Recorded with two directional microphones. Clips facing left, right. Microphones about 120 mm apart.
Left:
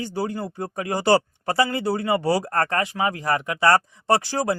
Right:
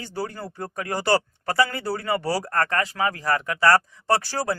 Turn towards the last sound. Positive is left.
turn(degrees=20)  # may be behind; listen again after turning